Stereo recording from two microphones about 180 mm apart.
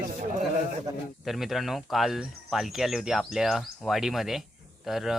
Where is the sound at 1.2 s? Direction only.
Centre (ahead or behind).